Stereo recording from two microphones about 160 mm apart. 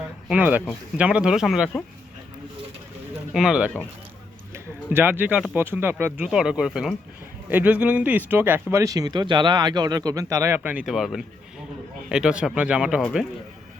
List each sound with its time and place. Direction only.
0.0 s a sound: 10° right (ahead or behind)
0.9 s speech: 5° right (ahead or behind)
3.3 s speech: 5° right (ahead or behind)
13.0 s speech: 5° left (ahead or behind)